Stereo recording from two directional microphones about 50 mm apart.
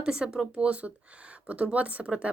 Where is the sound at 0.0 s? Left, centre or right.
Centre.